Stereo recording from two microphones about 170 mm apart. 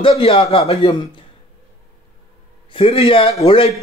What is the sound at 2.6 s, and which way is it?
Speech, 30° left (ahead or behind).